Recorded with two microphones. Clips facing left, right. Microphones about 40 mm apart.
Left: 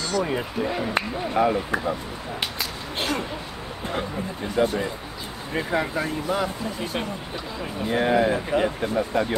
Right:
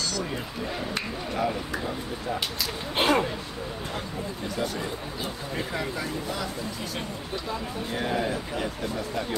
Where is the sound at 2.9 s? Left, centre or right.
Right.